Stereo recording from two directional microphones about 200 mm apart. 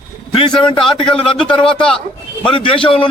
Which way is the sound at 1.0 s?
25° left (ahead or behind).